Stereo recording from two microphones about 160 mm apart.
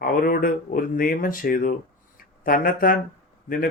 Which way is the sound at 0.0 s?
60° left (ahead or behind).